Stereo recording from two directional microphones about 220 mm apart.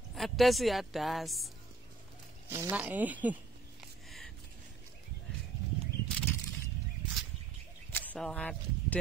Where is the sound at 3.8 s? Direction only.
Centre (ahead or behind).